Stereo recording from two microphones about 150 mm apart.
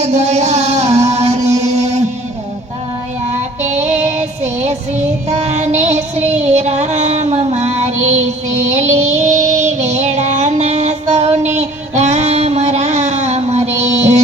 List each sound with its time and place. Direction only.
0.0 s music: 50° right (ahead or behind)
3.7 s music: 50° right (ahead or behind)
5.3 s child singing: 50° right (ahead or behind)